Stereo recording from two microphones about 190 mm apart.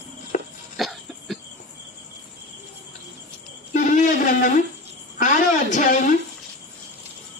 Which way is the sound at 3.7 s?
40° left (ahead or behind).